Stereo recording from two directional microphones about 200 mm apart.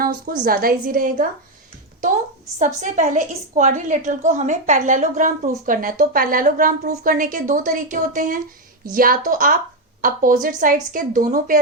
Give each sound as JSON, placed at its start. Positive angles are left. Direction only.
{"t": 0.3, "sound": "speech", "side_deg": -45}
{"t": 2.6, "sound": "a woman's voice", "side_deg": -40}